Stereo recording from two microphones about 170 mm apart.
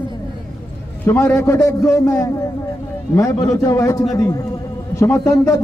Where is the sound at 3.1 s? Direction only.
20° left (ahead or behind).